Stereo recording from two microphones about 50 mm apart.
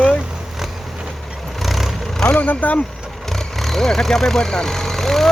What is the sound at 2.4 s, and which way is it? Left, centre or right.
Speech, left.